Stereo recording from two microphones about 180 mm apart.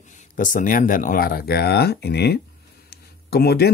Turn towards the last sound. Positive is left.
turn(degrees=60)  # may be behind; listen again after turning